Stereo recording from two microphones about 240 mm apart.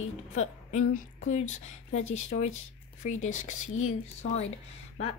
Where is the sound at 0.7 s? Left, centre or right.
Left.